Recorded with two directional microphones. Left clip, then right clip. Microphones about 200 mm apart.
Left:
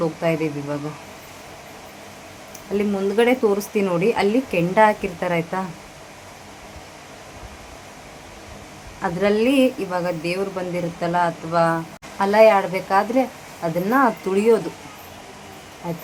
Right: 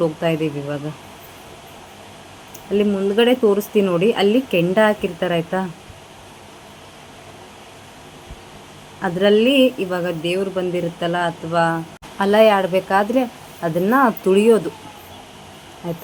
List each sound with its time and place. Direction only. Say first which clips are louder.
0.2 s speech: right 1 dB; 15° right (ahead or behind)
2.7 s speech: right 3 dB; 15° right (ahead or behind)
9.0 s a woman's voice: right 4 dB; 15° right (ahead or behind)